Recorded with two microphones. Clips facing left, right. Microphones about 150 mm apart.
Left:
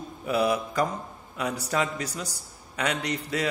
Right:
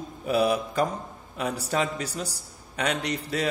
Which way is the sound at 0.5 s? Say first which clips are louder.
Right 1 dB; 30° right (ahead or behind).